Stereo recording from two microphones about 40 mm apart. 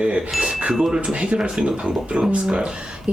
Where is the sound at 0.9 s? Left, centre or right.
Right.